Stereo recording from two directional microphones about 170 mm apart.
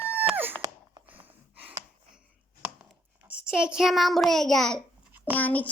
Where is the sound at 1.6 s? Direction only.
10° right (ahead or behind).